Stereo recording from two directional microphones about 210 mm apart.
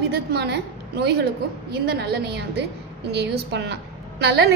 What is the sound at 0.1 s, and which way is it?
A woman's voice, 50° right (ahead or behind).